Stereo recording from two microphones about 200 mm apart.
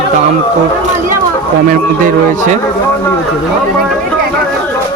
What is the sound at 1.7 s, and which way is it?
Speech, 40° right (ahead or behind).